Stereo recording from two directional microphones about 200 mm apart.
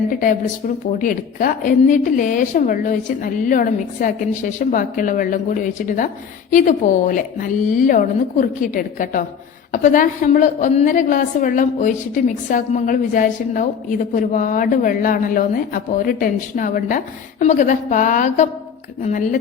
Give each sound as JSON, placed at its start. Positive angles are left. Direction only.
{"t": 0.9, "sound": "a woman's voice", "side_deg": 45}